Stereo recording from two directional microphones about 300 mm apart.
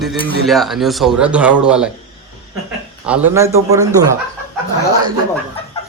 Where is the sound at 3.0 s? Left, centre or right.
Centre.